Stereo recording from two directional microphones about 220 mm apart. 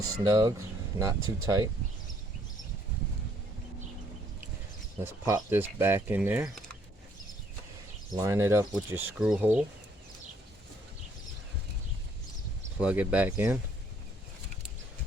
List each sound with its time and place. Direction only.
0.0 s speech: 15° right (ahead or behind)
5.2 s speech: 10° right (ahead or behind)
8.1 s speech: 15° right (ahead or behind)
12.8 s speech: 5° right (ahead or behind)